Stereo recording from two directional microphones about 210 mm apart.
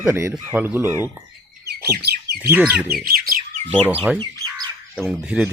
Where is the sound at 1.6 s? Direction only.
50° right (ahead or behind).